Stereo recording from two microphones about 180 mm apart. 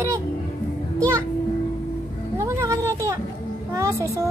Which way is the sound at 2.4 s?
15° right (ahead or behind).